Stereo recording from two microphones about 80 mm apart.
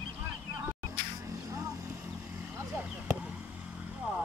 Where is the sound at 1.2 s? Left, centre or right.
Right.